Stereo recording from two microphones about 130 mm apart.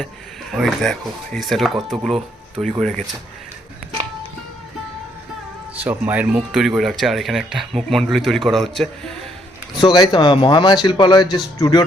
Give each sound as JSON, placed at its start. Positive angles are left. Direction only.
{"t": 0.5, "sound": "speech", "side_deg": 0}
{"t": 5.7, "sound": "speech", "side_deg": -15}
{"t": 9.8, "sound": "speech", "side_deg": 35}